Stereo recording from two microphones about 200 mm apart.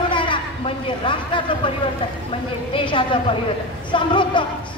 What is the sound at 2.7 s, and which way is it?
Speech, 25° left (ahead or behind).